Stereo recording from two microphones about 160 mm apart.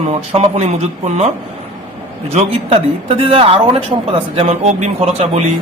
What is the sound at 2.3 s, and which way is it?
A man's voice, 40° right (ahead or behind).